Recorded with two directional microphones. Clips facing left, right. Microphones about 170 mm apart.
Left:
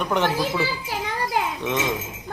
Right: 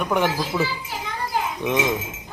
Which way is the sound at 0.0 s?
10° right (ahead or behind).